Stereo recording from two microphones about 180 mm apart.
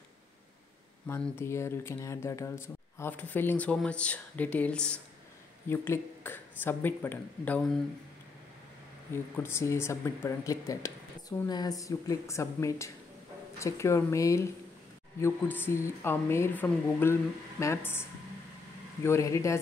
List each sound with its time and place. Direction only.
1.0 s speech: 10° left (ahead or behind)
9.1 s speech: 15° left (ahead or behind)
19.0 s speech: 15° left (ahead or behind)